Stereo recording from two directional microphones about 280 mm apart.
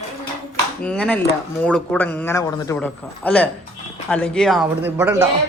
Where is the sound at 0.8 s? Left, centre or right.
Centre.